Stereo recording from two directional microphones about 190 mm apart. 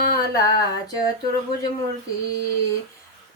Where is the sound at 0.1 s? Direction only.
20° left (ahead or behind).